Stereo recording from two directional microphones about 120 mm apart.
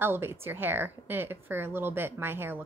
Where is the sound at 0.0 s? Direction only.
20° right (ahead or behind).